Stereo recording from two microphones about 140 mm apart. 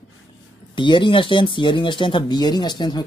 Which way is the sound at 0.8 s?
35° left (ahead or behind).